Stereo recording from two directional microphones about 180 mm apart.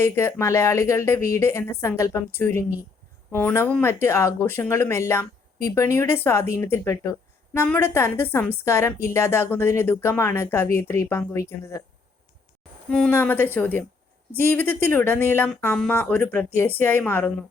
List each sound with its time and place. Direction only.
0.0 s a woman's voice: 15° left (ahead or behind)
12.9 s a woman's voice: 10° left (ahead or behind)